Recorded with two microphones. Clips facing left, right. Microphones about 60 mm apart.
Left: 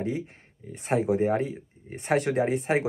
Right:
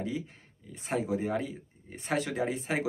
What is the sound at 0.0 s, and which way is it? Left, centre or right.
Speech, left.